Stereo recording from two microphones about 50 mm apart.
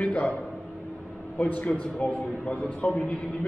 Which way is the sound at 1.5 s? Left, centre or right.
Left.